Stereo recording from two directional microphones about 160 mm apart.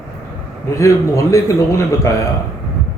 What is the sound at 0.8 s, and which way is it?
Speech, 20° left (ahead or behind).